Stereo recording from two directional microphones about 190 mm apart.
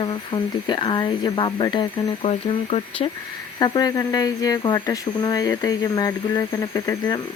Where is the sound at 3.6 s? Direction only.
20° left (ahead or behind).